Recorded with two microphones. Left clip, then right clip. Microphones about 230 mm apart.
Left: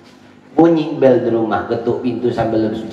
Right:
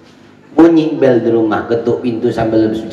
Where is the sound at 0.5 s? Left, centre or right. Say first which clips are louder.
Right 4 dB; right.